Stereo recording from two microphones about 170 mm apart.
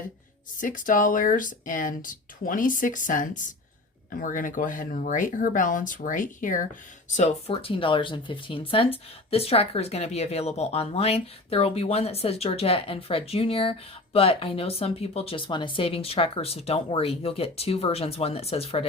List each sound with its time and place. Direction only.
0.6 s speech: 50° left (ahead or behind); by 18.9 s 35° left (ahead or behind)